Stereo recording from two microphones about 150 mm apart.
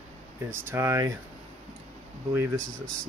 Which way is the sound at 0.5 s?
15° right (ahead or behind).